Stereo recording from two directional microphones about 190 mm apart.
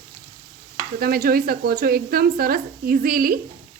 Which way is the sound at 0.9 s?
50° right (ahead or behind).